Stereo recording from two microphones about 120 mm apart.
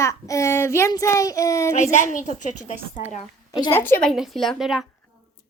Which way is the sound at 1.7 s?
85° left.